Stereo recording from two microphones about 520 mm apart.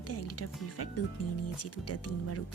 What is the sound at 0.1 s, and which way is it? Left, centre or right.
Speech, left.